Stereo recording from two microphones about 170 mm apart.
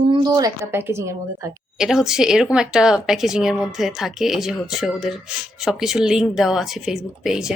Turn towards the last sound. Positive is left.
turn(degrees=0)  # may be behind; listen again after turning